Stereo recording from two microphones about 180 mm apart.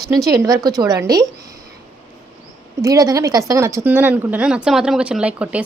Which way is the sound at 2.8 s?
20° right (ahead or behind).